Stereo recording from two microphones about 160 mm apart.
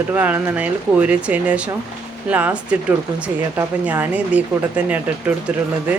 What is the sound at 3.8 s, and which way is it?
Speech, 10° right (ahead or behind).